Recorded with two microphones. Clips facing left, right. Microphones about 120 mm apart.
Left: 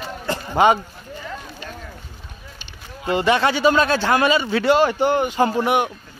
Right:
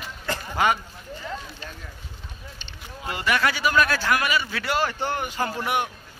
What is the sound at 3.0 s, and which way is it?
A man's voice, 25° left (ahead or behind).